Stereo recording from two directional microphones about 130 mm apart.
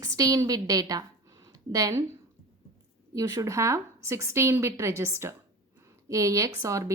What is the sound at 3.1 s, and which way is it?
A woman's voice, 25° right (ahead or behind).